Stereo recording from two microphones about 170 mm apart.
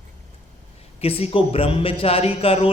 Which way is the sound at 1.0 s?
35° left (ahead or behind).